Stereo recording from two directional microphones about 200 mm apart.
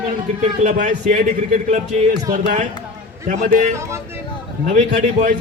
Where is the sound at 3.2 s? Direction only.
40° right (ahead or behind).